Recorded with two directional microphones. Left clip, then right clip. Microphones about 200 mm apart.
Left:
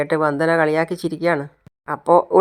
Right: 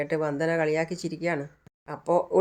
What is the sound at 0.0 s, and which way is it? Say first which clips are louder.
Speech: left 9 dB; 15° left (ahead or behind).